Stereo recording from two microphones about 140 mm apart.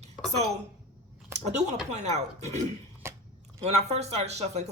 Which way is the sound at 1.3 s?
55° right (ahead or behind).